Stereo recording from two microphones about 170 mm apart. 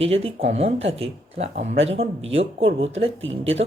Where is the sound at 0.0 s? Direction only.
35° right (ahead or behind).